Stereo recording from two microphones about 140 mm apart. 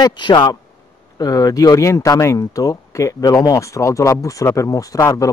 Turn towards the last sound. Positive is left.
turn(degrees=25)  # may be behind; listen again after turning